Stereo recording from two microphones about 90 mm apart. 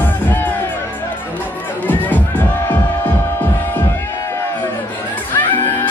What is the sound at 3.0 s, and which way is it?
Throbbing, 20° left (ahead or behind).